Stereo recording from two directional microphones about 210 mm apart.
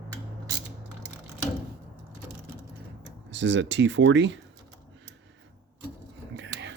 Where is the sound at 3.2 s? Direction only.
60° right (ahead or behind).